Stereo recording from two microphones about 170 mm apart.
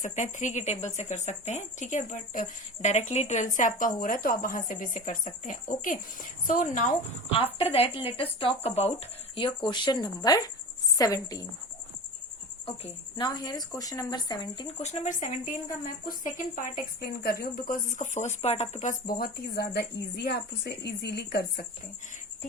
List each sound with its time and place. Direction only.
0.0 s speech: 50° left (ahead or behind)
7.3 s speech: 35° left (ahead or behind)
12.6 s speech: 30° left (ahead or behind)
14.8 s speech: 40° left (ahead or behind); by 21.7 s 60° left (ahead or behind)